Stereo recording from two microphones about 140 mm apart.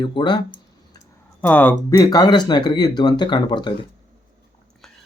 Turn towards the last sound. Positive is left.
turn(degrees=35)  # may be behind; listen again after turning